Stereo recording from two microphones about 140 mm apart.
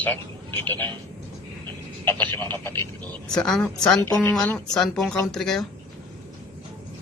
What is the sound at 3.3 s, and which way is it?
A man's voice, 5° left (ahead or behind).